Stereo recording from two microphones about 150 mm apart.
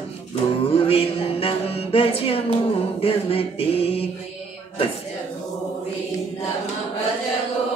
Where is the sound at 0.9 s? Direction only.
40° left (ahead or behind).